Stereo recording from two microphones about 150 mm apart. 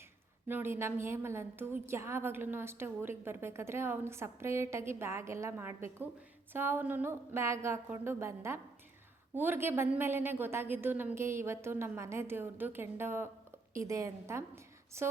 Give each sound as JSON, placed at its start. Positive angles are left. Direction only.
{"t": 0.4, "sound": "a woman's voice", "side_deg": -15}